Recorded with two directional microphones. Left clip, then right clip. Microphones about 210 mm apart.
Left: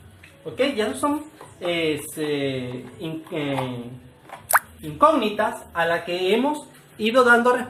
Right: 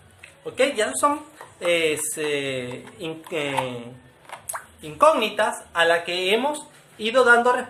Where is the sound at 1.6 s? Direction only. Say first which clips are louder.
Right 3 dB; 50° right (ahead or behind).